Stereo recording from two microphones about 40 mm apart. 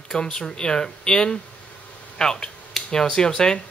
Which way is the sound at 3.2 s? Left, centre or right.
Centre.